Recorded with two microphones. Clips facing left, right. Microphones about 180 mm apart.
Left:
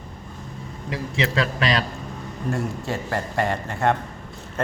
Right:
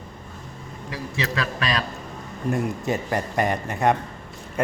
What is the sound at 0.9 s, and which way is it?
Speech, 25° left (ahead or behind).